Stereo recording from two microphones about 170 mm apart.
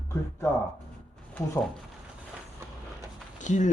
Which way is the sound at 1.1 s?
5° left (ahead or behind).